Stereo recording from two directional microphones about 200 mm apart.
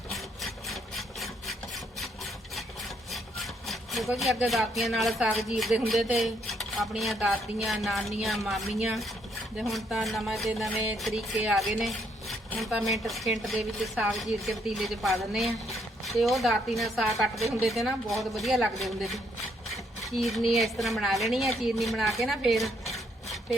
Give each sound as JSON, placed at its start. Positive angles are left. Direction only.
{"t": 0.1, "sound": "rub", "side_deg": 0}
{"t": 3.1, "sound": "sawing", "side_deg": 0}
{"t": 8.2, "sound": "a woman's voice", "side_deg": 0}
{"t": 19.7, "sound": "a sound", "side_deg": 0}
{"t": 20.5, "sound": "a woman's voice", "side_deg": 0}